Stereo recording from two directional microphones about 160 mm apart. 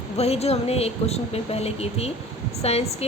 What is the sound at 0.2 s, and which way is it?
A woman's voice, 40° left (ahead or behind).